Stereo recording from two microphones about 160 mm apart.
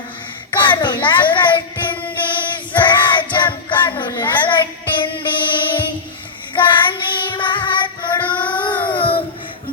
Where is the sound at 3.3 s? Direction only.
30° left (ahead or behind).